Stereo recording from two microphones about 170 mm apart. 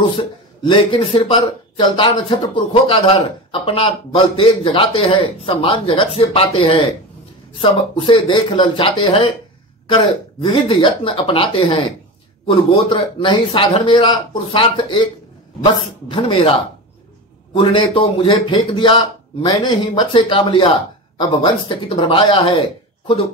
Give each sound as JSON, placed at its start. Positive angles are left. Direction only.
{"t": 0.2, "sound": "a man's voice", "side_deg": 30}
{"t": 17.6, "sound": "a man's voice", "side_deg": 30}